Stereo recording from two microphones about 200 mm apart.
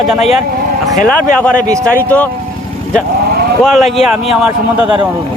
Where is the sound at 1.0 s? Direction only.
5° left (ahead or behind).